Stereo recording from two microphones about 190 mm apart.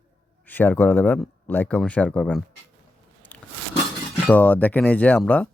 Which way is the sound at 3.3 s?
10° left (ahead or behind).